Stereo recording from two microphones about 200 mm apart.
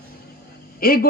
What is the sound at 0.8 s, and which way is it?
Speech, 50° left (ahead or behind).